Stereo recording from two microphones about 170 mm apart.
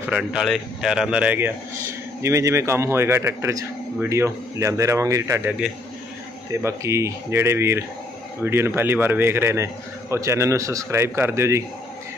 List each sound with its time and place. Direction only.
0.0 s a man's voice: 5° right (ahead or behind)
6.6 s a man's voice: 15° right (ahead or behind)